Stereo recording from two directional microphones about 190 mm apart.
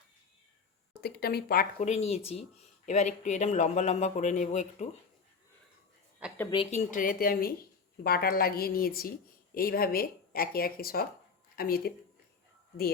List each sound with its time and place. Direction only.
1.0 s speech: 55° left (ahead or behind)
1.8 s speech: 35° left (ahead or behind)
6.5 s speech: 30° left (ahead or behind); by 11.9 s 50° left (ahead or behind)